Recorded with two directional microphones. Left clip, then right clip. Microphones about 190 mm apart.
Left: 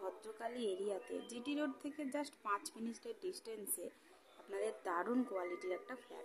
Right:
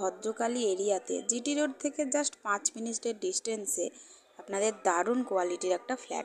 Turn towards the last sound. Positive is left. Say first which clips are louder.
# right 14 dB
turn(degrees=-30)  # may be behind; listen again after turning